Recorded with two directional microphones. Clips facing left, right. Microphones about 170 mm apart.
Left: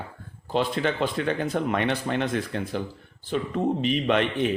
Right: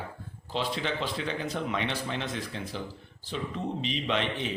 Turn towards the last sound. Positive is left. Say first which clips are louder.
# left 7 dB
turn(degrees=55)  # may be behind; listen again after turning